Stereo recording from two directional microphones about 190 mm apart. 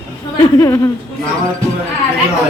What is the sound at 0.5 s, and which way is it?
Speech, 15° left (ahead or behind).